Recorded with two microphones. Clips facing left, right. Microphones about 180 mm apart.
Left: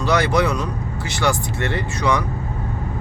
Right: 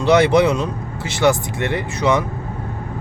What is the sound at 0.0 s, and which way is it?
Speech, 25° right (ahead or behind).